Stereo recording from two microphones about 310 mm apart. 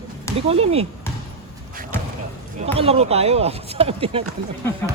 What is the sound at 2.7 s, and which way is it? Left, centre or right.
Speech, centre.